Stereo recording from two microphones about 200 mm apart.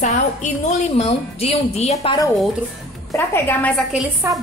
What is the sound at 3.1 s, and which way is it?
Speech, 10° left (ahead or behind).